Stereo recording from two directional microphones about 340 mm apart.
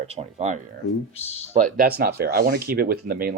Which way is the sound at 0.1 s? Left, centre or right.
Centre.